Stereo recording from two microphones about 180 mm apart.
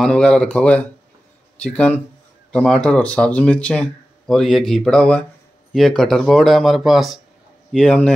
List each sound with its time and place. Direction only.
0.0 s speech: 5° left (ahead or behind)